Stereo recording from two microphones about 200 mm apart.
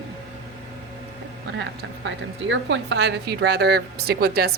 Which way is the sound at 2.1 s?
65° right (ahead or behind).